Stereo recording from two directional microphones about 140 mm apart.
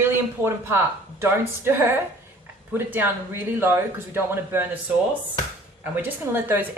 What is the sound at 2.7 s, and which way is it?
Speech, 15° right (ahead or behind).